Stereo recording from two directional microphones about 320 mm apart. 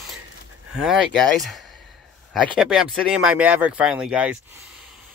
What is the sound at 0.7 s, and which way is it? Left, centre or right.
Speech, centre.